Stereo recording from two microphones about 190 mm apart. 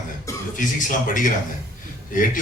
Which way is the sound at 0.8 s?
45° left (ahead or behind).